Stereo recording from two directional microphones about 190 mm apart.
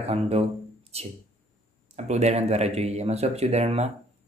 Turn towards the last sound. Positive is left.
turn(degrees=-35)  # may be behind; listen again after turning